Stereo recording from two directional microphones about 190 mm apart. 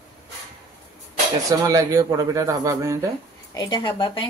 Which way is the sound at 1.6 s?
15° right (ahead or behind).